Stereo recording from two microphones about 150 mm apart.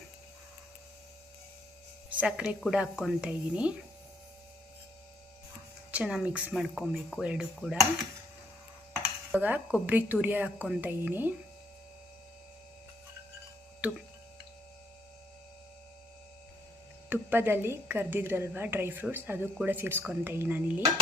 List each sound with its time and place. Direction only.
2.1 s speech: 5° right (ahead or behind)
5.9 s speech: 5° right (ahead or behind)
9.0 s a woman's voice: 10° right (ahead or behind)
13.8 s speech: 10° right (ahead or behind)
17.1 s a woman's voice: 15° right (ahead or behind)